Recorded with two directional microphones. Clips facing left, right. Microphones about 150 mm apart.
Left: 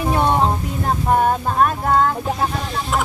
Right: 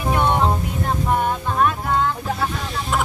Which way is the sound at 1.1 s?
45° left (ahead or behind).